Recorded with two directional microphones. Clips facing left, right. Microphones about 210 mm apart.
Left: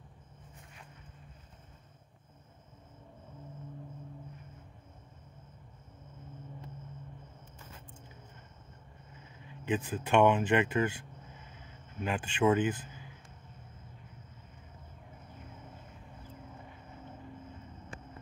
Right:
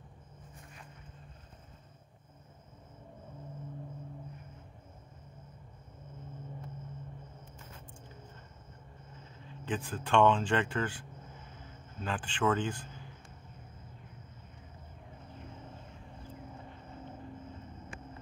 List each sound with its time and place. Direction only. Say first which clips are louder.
9.5 s speech: left 4 dB; 15° left (ahead or behind)